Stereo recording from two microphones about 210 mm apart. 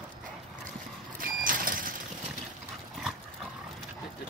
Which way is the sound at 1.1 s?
40° right (ahead or behind).